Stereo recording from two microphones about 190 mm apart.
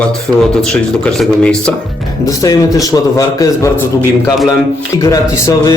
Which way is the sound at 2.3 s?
20° left (ahead or behind).